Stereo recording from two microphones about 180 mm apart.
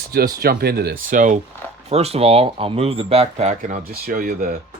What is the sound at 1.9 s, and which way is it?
Speech, 35° right (ahead or behind).